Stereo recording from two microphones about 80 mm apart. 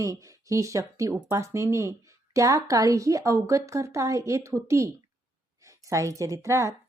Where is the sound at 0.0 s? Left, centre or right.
Right.